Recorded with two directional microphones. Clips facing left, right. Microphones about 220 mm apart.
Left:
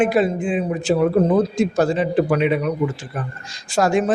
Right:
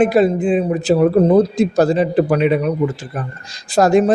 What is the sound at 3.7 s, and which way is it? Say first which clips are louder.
Speech: right 5 dB; 35° right (ahead or behind).